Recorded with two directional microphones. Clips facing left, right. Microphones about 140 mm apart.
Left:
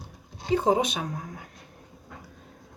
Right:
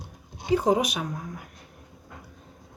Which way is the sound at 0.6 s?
25° left (ahead or behind).